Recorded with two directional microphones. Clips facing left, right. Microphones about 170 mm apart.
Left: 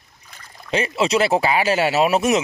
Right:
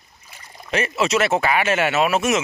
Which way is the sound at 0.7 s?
30° left (ahead or behind).